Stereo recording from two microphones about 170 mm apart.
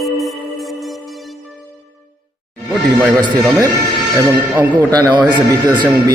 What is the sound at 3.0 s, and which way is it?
A man's voice, centre (ahead or behind).